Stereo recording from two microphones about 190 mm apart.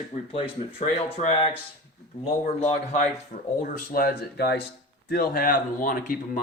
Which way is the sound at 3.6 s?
50° left (ahead or behind).